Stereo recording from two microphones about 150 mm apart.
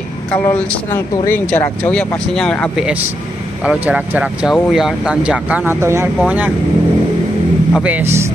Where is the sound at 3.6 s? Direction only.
10° right (ahead or behind).